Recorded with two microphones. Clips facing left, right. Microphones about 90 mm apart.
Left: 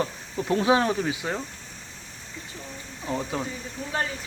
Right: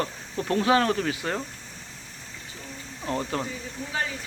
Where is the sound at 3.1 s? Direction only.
5° left (ahead or behind).